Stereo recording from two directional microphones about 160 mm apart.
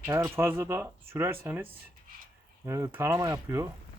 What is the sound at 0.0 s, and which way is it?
Speech, 15° right (ahead or behind).